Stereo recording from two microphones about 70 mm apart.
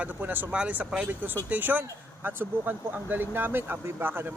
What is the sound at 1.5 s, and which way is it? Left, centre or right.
Speech, right.